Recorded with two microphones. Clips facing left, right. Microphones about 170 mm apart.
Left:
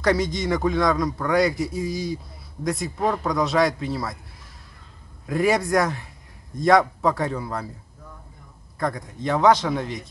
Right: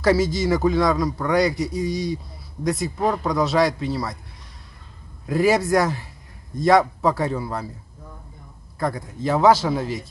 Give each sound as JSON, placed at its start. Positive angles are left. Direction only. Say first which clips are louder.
{"t": 0.0, "sound": "a man's voice", "louder": "right 3 dB", "side_deg": -5}
{"t": 5.2, "sound": "a man's voice", "louder": "right 2 dB", "side_deg": 0}
{"t": 8.7, "sound": "a man's voice", "louder": "right 1 dB", "side_deg": 0}